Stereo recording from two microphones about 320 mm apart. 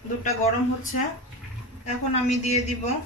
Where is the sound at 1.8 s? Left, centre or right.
Left.